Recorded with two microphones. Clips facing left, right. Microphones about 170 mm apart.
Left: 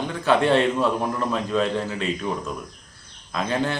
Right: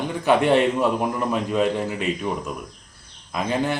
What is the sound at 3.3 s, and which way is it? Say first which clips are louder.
Speech: right 1 dB; 15° right (ahead or behind).